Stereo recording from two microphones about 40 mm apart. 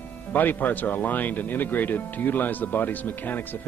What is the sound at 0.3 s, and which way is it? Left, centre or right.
Speech, left.